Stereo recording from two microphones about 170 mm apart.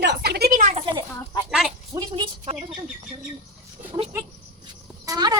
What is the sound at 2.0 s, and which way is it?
Speech, 25° right (ahead or behind).